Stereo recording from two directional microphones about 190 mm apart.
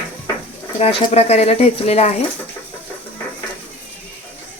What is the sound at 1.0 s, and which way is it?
Speech, 35° left (ahead or behind).